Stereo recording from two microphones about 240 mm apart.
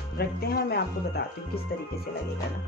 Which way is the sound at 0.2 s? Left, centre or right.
Left.